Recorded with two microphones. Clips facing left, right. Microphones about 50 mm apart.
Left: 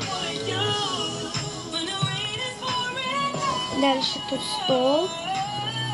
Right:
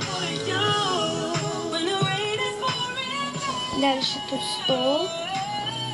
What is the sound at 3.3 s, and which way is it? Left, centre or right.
Music, left.